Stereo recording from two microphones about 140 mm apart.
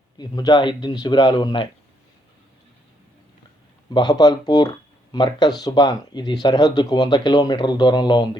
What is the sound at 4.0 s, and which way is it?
A man's voice, 30° left (ahead or behind).